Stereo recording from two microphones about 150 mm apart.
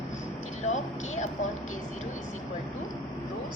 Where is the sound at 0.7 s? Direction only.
50° left (ahead or behind).